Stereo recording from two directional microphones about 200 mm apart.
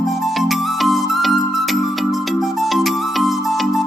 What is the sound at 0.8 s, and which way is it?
Music, centre (ahead or behind).